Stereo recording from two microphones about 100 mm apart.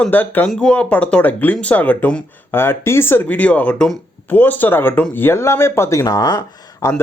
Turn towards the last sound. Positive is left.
turn(degrees=30)  # may be behind; listen again after turning